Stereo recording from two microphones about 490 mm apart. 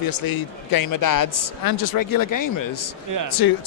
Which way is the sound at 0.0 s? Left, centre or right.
Left.